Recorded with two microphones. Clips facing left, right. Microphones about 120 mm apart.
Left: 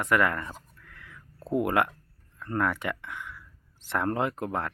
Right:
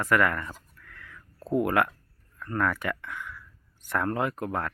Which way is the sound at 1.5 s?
20° left (ahead or behind).